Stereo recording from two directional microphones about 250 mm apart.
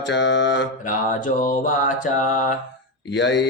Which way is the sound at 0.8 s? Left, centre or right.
Left.